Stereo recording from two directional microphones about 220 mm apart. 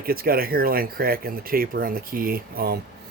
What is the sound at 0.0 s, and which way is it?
Speech, 40° right (ahead or behind).